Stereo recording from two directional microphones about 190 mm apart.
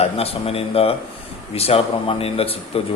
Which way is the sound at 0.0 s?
30° left (ahead or behind).